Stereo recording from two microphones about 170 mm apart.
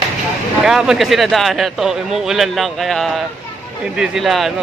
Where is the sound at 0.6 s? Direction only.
5° right (ahead or behind).